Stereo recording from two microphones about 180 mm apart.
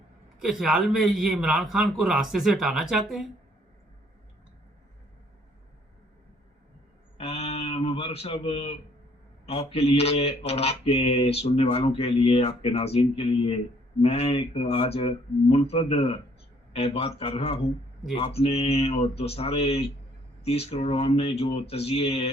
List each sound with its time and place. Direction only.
0.4 s speech: centre (ahead or behind)
7.2 s a sound: 35° left (ahead or behind)
9.5 s mantra: 35° left (ahead or behind)